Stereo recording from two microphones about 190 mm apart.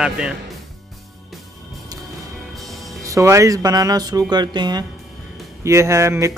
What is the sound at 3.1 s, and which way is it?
Speech, 15° right (ahead or behind).